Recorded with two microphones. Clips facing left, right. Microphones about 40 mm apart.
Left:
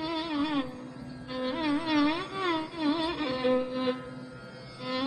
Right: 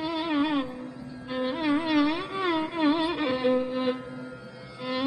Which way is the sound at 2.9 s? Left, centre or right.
Centre.